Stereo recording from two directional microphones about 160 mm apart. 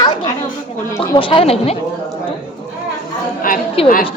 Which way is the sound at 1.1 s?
35° left (ahead or behind).